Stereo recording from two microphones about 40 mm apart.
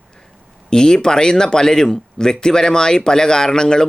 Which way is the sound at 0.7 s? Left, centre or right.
Centre.